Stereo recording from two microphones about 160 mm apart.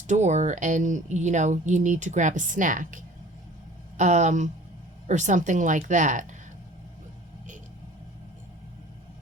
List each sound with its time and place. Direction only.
0.1 s speech: 45° right (ahead or behind)